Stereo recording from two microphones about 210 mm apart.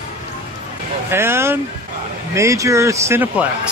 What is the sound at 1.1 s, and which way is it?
Speech, 10° right (ahead or behind).